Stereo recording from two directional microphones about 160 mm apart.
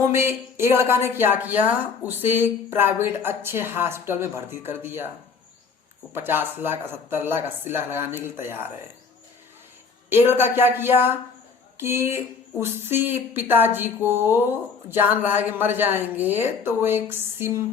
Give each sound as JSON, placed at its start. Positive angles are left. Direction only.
{"t": 0.0, "sound": "speech", "side_deg": -15}
{"t": 6.1, "sound": "speech", "side_deg": -15}
{"t": 10.1, "sound": "speech", "side_deg": -15}